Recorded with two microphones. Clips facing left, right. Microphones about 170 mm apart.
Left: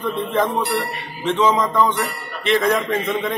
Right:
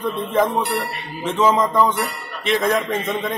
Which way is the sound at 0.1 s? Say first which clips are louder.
Right 1 dB; centre (ahead or behind).